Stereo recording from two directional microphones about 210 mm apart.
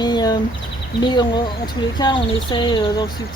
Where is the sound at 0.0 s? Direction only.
20° left (ahead or behind).